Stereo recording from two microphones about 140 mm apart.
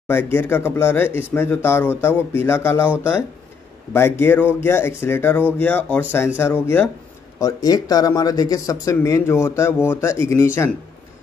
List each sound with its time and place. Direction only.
0.1 s speech: 15° left (ahead or behind)
3.9 s speech: 15° left (ahead or behind)
7.3 s speech: 25° left (ahead or behind)